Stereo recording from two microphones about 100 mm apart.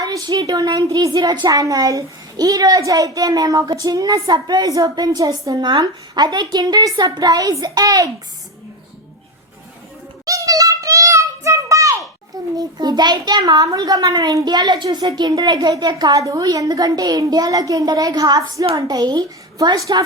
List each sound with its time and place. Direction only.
0.0 s a woman's voice: 45° right (ahead or behind)
10.2 s child singing: 35° right (ahead or behind)
12.5 s a child's voice: 45° right (ahead or behind)
16.1 s a woman's voice: 35° right (ahead or behind)